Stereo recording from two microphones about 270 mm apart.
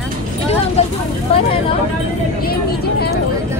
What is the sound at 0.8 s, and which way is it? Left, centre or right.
Speech, left.